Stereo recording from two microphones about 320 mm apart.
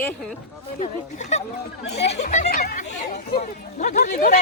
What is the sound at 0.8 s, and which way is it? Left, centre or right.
Speech, left.